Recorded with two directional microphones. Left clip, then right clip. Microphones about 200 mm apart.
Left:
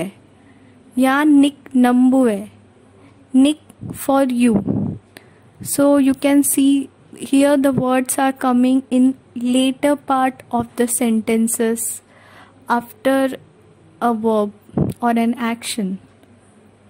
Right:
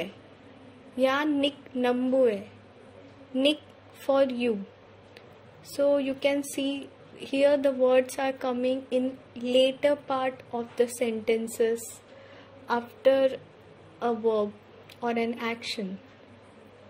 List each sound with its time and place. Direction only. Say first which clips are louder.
0.9 s speech: left 11 dB; 45° left (ahead or behind)
4.0 s speech: left 8 dB; 50° left (ahead or behind)
5.8 s a woman's voice: left 10 dB; 50° left (ahead or behind)